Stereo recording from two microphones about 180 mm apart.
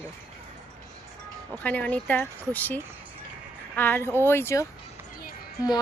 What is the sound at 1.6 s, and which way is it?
A woman's voice, 10° left (ahead or behind).